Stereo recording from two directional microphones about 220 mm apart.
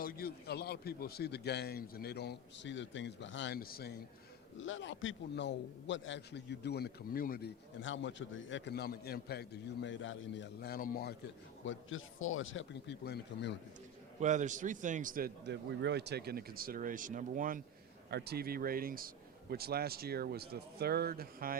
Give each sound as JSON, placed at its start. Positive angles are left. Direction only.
{"t": 0.0, "sound": "a man's voice", "side_deg": 45}
{"t": 4.5, "sound": "a man's voice", "side_deg": 60}
{"t": 11.6, "sound": "speech", "side_deg": 60}
{"t": 14.2, "sound": "a man's voice", "side_deg": -35}